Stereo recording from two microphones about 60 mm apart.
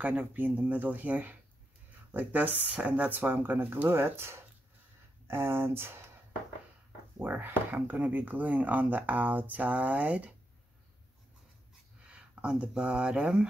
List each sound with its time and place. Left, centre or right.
0.0 s speech: right
7.2 s speech: right
12.0 s speech: centre